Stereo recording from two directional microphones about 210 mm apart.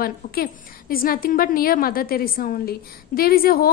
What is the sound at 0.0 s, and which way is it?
A woman's voice, 45° left (ahead or behind).